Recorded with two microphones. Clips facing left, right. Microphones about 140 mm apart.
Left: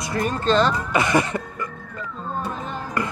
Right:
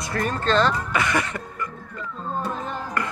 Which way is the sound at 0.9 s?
30° left (ahead or behind).